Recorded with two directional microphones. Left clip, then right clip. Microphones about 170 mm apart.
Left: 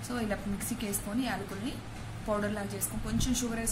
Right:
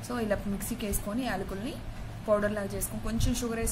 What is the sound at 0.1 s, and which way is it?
A woman's voice, 35° right (ahead or behind).